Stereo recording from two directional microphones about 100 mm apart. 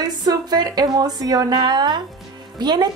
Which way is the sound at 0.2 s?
40° right (ahead or behind).